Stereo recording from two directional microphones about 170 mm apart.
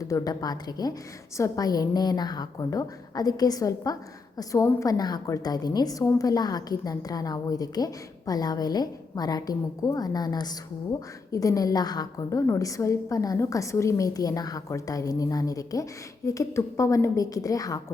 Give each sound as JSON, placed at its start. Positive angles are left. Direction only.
{"t": 0.0, "sound": "a woman's voice", "side_deg": 20}